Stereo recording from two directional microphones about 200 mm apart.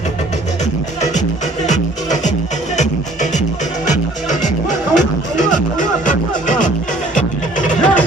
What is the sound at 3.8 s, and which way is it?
Music, 35° left (ahead or behind).